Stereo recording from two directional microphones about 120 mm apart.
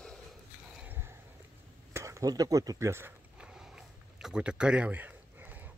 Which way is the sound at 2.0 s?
25° right (ahead or behind).